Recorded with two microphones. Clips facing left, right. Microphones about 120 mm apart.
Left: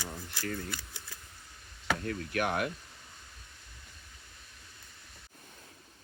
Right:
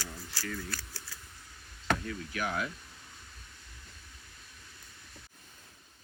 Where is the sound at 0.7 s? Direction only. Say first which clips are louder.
Even; 20° left (ahead or behind).